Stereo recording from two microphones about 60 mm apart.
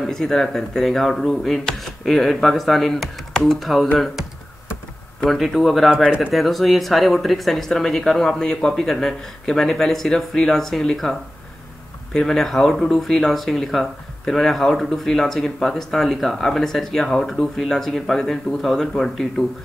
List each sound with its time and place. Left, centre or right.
0.0 s speech: centre
6.0 s speech: centre
6.3 s speech: centre